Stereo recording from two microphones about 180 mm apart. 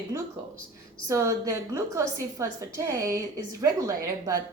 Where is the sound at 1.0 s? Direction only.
15° right (ahead or behind).